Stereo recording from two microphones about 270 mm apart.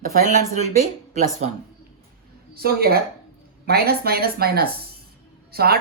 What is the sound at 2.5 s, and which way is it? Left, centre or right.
Speech, right.